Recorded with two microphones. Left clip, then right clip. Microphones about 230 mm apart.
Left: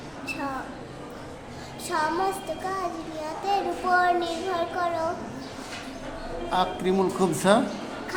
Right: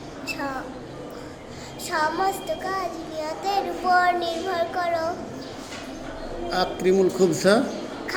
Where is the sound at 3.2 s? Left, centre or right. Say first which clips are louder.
Right 2 dB; centre.